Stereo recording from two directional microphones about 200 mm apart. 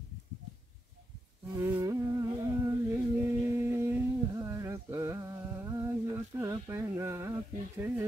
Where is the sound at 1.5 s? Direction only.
10° right (ahead or behind).